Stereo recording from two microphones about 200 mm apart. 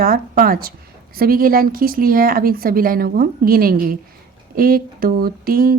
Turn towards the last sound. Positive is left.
turn(degrees=-45)  # may be behind; listen again after turning